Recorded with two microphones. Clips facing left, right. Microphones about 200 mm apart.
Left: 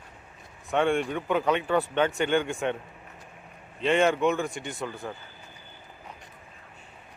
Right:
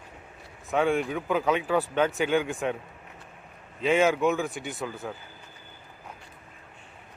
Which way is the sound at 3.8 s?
5° right (ahead or behind).